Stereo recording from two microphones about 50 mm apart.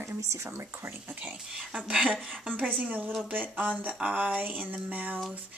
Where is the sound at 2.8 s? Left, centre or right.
Right.